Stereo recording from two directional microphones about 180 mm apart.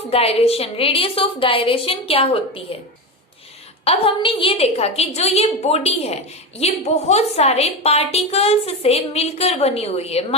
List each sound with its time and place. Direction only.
0.1 s a woman's voice: 35° left (ahead or behind)
3.8 s a woman's voice: 30° left (ahead or behind)